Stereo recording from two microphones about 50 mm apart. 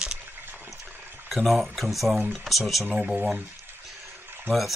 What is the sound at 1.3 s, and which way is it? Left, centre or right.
Speech, centre.